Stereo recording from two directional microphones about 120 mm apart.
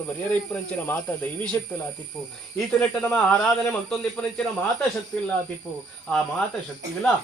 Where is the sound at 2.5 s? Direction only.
10° left (ahead or behind).